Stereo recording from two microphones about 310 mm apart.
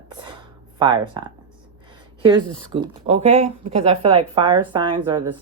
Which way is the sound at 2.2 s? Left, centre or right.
Centre.